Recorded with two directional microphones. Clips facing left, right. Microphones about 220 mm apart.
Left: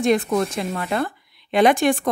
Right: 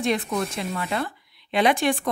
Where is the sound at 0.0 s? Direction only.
45° left (ahead or behind).